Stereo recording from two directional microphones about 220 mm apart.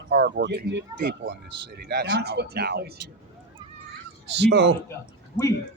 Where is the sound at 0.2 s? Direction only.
50° right (ahead or behind).